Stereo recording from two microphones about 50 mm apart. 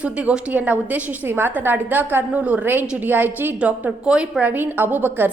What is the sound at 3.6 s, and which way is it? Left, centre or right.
Speech, right.